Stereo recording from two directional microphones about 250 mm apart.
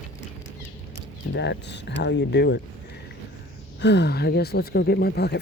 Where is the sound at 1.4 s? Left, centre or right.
Left.